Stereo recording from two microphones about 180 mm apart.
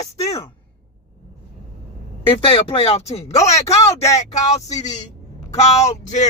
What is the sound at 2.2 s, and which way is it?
Speech, 30° left (ahead or behind).